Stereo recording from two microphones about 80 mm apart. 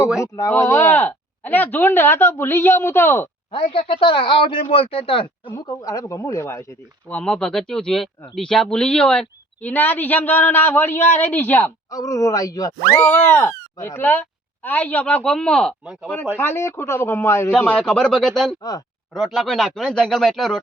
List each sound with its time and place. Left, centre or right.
0.2 s speech: left
0.9 s speech: left
3.5 s a man's voice: left
5.6 s speech: left
7.1 s speech: centre
9.6 s speech: left
11.9 s speech: left
13.0 s speech: left; by 15.7 s centre
15.8 s speech: centre
16.4 s speech: left
17.7 s speech: centre